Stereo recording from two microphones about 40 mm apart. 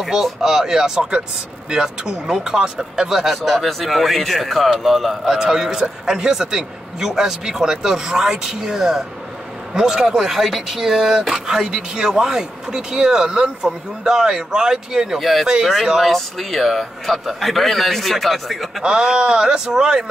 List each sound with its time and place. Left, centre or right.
0.0 s a man's voice: centre
5.2 s a man's voice: centre
15.1 s a man's voice: centre
16.1 s a man's voice: centre
18.8 s a man's voice: centre